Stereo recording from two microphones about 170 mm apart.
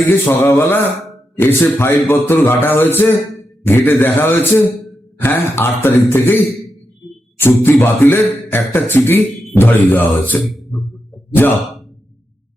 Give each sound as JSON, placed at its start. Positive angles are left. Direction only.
{"t": 0.3, "sound": "a man's voice", "side_deg": 15}